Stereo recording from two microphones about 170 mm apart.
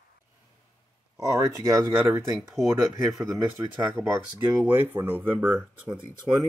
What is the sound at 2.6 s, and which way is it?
Speech, centre (ahead or behind).